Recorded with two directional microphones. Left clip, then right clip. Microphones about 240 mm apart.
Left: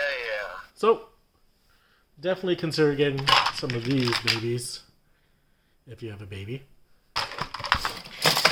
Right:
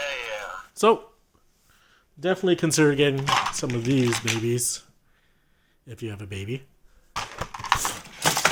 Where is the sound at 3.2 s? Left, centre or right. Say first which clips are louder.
Left 2 dB; left.